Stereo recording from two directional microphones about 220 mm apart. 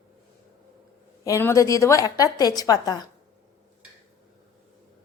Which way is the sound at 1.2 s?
15° left (ahead or behind).